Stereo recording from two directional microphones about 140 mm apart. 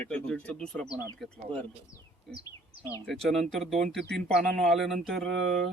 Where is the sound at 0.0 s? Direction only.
10° left (ahead or behind).